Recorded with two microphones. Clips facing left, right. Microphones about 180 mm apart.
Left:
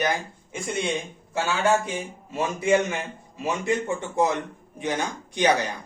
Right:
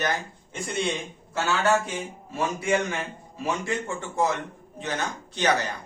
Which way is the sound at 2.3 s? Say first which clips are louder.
Left 3 dB; 20° left (ahead or behind).